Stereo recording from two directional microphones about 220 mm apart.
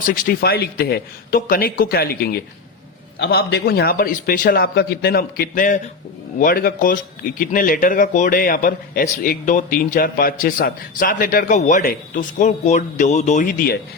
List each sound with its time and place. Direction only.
0.0 s a man's voice: 40° left (ahead or behind)